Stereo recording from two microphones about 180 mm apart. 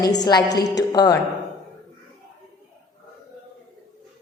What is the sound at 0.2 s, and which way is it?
A woman's voice, 20° left (ahead or behind).